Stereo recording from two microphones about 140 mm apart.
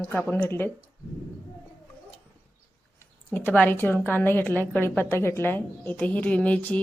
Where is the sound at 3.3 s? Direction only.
10° left (ahead or behind).